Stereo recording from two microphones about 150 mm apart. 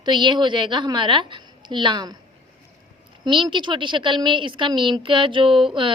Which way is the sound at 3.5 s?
30° right (ahead or behind).